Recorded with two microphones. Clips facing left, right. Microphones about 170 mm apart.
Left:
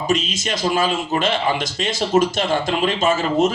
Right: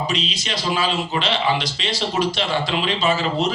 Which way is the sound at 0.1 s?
45° left (ahead or behind).